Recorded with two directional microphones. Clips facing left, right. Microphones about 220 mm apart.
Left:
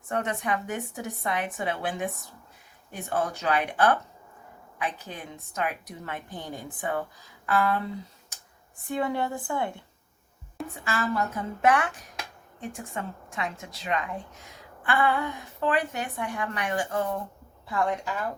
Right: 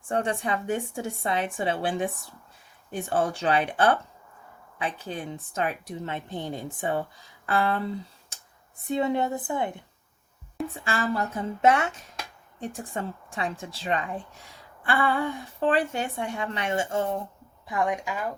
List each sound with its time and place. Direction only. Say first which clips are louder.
0.1 s a woman's voice: right 2 dB; 30° right (ahead or behind)
8.9 s a woman's voice: right 3 dB; 20° right (ahead or behind)
10.8 s a woman's voice: even; 30° right (ahead or behind)
17.7 s speech: right 1 dB; 15° right (ahead or behind)